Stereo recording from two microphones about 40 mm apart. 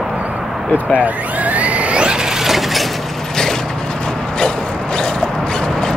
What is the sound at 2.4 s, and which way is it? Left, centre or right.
Mechanisms, centre.